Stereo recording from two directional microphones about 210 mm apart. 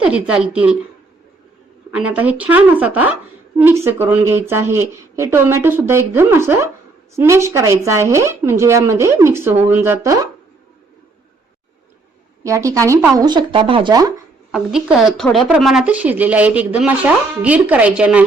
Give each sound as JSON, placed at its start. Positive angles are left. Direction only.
{"t": 0.0, "sound": "a woman's voice", "side_deg": -5}
{"t": 1.9, "sound": "speech", "side_deg": -5}
{"t": 12.4, "sound": "speech", "side_deg": -15}
{"t": 13.2, "sound": "speech", "side_deg": -20}
{"t": 14.5, "sound": "a woman's voice", "side_deg": -5}